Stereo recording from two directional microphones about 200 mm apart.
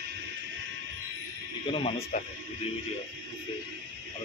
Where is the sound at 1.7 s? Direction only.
30° left (ahead or behind).